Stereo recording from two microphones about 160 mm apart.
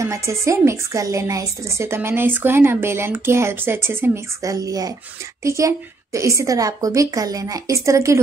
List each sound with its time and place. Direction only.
0.0 s a woman's voice: 20° right (ahead or behind)